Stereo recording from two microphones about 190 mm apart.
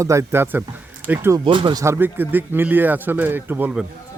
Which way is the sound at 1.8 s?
10° right (ahead or behind).